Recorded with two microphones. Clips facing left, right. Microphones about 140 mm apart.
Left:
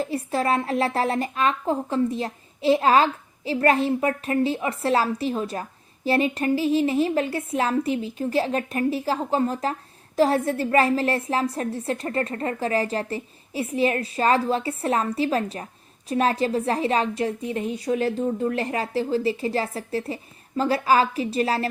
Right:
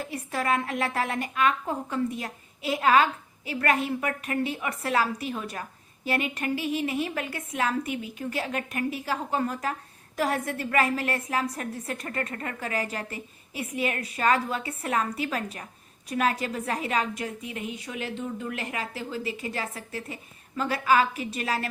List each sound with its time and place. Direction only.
0.0 s a woman's voice: 30° left (ahead or behind)